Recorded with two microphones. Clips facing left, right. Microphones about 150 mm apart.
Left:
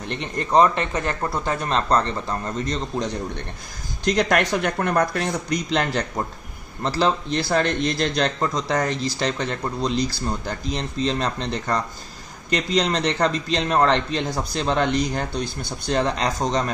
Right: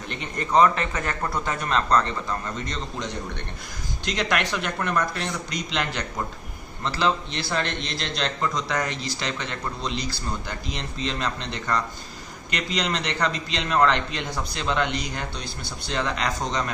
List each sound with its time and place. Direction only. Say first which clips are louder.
0.6 s a man's voice: right 1 dB; 30° left (ahead or behind)